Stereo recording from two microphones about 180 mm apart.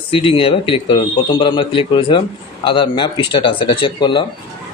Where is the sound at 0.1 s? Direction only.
30° left (ahead or behind).